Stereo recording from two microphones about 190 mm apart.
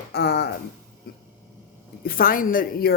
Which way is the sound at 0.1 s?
60° left (ahead or behind).